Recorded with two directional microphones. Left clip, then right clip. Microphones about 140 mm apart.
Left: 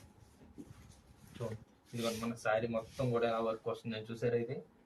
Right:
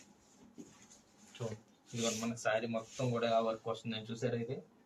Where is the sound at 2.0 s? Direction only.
15° left (ahead or behind).